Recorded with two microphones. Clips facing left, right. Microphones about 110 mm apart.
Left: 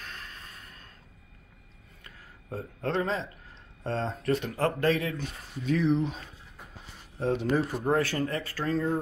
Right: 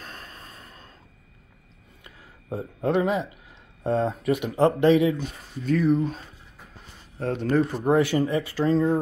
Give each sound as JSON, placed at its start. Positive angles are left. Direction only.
{"t": 0.0, "sound": "a sound", "side_deg": -35}
{"t": 2.0, "sound": "speech", "side_deg": -15}
{"t": 5.6, "sound": "speech", "side_deg": 0}
{"t": 7.2, "sound": "speech", "side_deg": 5}
{"t": 7.8, "sound": "speech", "side_deg": -15}
{"t": 8.6, "sound": "speech", "side_deg": -30}